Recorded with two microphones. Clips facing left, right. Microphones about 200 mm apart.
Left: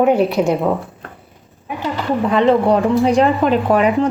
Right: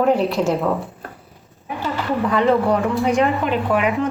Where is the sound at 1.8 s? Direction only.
20° left (ahead or behind).